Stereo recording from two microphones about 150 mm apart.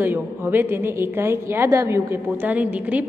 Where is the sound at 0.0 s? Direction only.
15° right (ahead or behind).